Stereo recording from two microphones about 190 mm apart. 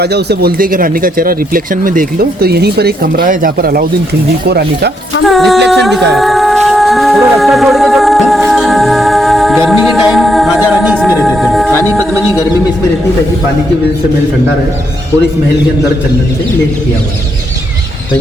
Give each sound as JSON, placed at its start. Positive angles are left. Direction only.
{"t": 0.0, "sound": "speech", "side_deg": -60}
{"t": 5.2, "sound": "music", "side_deg": 0}
{"t": 11.7, "sound": "music", "side_deg": 10}
{"t": 11.9, "sound": "music", "side_deg": -15}